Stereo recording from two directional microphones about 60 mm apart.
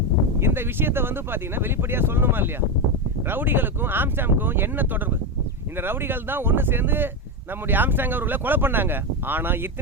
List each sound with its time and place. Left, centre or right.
0.3 s speech: right